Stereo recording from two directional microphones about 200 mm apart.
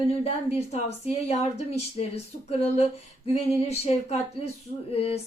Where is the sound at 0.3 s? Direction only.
30° left (ahead or behind).